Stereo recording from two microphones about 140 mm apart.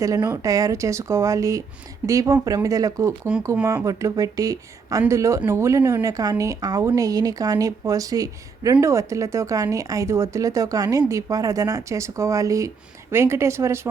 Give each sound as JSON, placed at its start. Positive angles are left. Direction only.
{"t": 0.0, "sound": "a woman's voice", "side_deg": -25}